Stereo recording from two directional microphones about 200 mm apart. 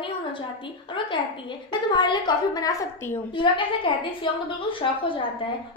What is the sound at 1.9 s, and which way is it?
A woman's voice, 20° left (ahead or behind).